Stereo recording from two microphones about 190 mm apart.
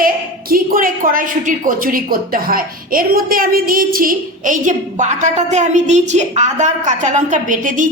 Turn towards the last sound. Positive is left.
turn(degrees=-40)  # may be behind; listen again after turning